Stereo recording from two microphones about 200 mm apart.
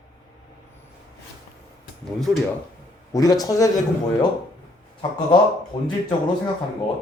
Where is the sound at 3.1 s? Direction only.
20° left (ahead or behind).